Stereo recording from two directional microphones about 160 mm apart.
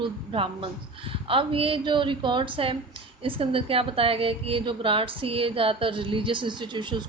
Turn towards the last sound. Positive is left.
turn(degrees=-30)  # may be behind; listen again after turning